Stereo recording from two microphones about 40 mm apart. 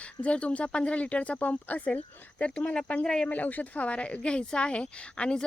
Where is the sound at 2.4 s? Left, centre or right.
Left.